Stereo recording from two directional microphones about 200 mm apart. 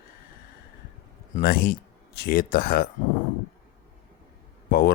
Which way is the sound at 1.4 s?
50° left (ahead or behind).